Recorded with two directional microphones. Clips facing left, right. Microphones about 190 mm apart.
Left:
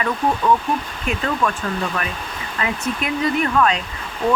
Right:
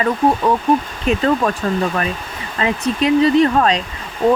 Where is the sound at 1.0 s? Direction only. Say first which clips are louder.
Right 5 dB; 35° right (ahead or behind).